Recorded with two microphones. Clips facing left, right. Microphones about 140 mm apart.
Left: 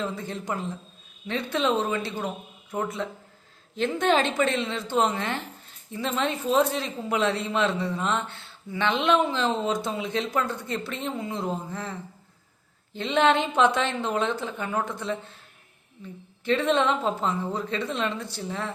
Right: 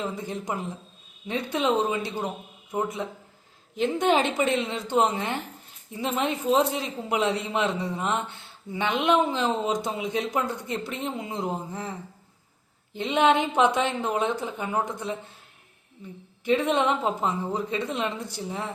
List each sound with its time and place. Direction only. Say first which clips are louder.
0.0 s a woman's voice: even; 15° right (ahead or behind)
16.4 s a woman's voice: even; 15° right (ahead or behind)